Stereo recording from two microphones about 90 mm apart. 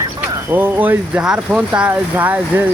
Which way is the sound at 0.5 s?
20° right (ahead or behind).